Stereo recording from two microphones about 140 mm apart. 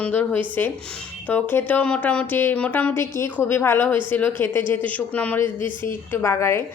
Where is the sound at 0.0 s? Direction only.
10° left (ahead or behind).